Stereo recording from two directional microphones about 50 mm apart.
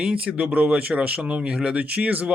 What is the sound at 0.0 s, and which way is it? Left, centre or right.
Speech, right.